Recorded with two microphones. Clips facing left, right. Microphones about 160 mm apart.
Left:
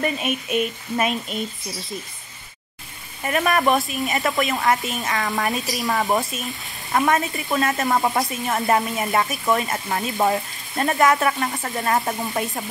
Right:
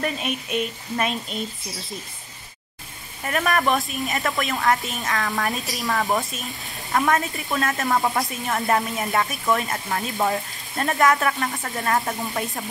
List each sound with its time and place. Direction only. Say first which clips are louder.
0.0 s speech: left 3 dB; 5° left (ahead or behind)
3.3 s speech: left 2 dB; 5° left (ahead or behind)
5.9 s speech: left 1 dB; 20° left (ahead or behind)
6.9 s speech: left 1 dB; 5° left (ahead or behind)